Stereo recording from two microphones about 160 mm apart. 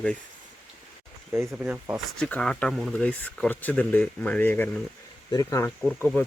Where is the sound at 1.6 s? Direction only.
10° right (ahead or behind).